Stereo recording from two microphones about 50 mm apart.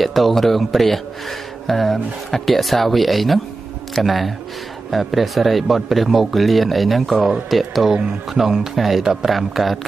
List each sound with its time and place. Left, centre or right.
0.0 s speech: centre